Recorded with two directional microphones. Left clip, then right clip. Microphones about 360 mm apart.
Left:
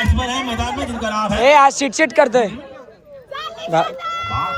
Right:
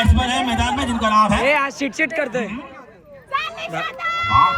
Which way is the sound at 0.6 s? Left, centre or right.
Centre.